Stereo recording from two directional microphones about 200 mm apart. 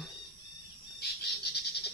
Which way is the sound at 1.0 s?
50° left (ahead or behind).